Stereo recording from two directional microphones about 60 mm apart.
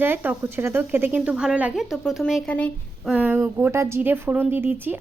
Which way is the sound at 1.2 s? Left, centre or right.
Centre.